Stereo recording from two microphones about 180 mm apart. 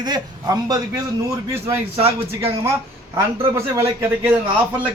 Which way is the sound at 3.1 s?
20° right (ahead or behind).